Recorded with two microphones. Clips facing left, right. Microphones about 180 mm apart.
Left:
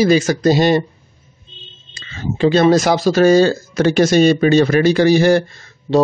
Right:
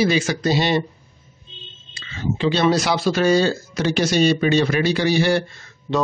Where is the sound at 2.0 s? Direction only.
45° left (ahead or behind).